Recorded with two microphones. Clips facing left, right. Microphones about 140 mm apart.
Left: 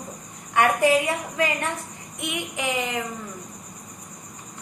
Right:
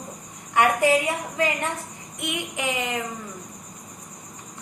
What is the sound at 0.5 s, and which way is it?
Speech, 20° right (ahead or behind).